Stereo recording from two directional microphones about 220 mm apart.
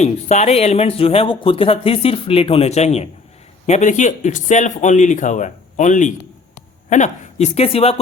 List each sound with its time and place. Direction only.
0.0 s speech: 30° left (ahead or behind)